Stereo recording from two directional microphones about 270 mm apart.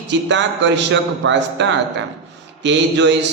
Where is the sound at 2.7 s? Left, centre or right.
Right.